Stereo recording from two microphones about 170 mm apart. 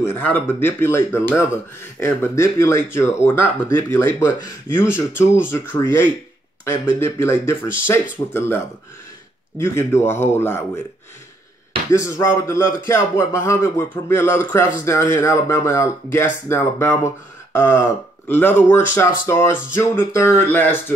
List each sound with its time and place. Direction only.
0.0 s a man's voice: 10° left (ahead or behind)
12.0 s a man's voice: 20° left (ahead or behind)